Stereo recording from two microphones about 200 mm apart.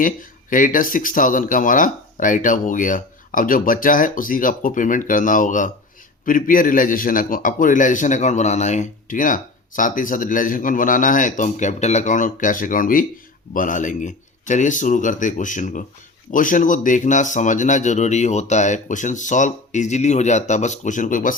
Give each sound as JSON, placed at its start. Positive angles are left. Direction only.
{"t": 0.0, "sound": "a man's voice", "side_deg": 40}